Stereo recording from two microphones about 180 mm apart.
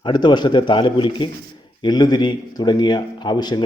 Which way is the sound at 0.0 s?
25° left (ahead or behind).